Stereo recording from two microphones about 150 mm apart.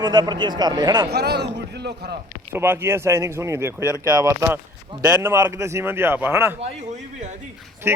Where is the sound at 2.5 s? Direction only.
15° right (ahead or behind).